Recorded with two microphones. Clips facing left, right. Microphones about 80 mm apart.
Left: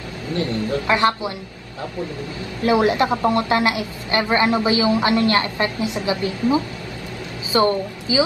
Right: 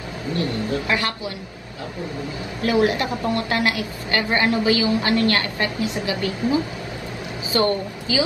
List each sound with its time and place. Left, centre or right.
0.8 s a woman's voice: left
2.6 s a woman's voice: left